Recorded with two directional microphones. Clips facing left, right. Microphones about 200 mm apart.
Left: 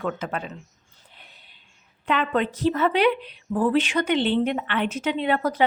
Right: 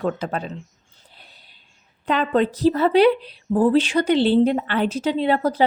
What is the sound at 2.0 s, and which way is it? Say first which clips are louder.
A woman's voice: right 4 dB; 35° right (ahead or behind).